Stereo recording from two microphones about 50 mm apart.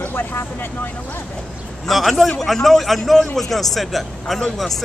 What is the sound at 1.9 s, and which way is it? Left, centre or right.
A man's voice, centre.